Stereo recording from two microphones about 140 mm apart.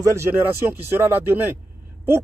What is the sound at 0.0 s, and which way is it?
Speech, 20° right (ahead or behind).